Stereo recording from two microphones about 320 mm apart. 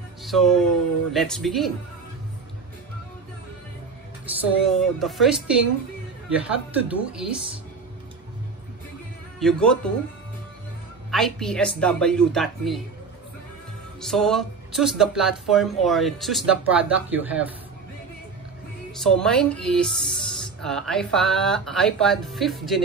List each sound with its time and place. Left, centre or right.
0.2 s speech: centre
4.3 s speech: centre
9.4 s speech: centre
11.1 s speech: centre
14.0 s speech: centre
18.9 s speech: centre